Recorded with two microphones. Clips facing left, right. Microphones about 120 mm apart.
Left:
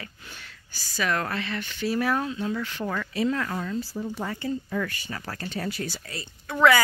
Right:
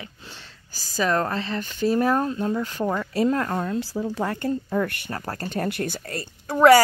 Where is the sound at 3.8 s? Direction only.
90° right.